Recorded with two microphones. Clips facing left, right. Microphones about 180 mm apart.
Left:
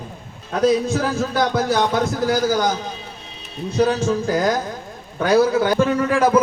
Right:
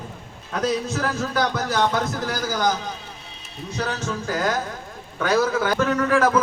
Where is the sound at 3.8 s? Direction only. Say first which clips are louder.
Left 10 dB; 30° left (ahead or behind).